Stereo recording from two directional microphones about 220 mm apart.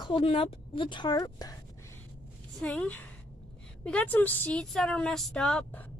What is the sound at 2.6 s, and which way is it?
A woman's voice, 5° left (ahead or behind).